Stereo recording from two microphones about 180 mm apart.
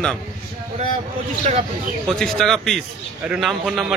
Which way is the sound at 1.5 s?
45° right (ahead or behind).